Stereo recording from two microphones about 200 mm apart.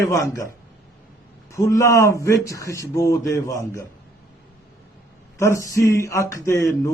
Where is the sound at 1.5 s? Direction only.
15° left (ahead or behind).